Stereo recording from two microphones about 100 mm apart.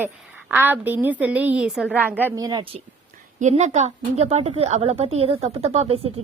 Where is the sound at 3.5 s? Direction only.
90° right.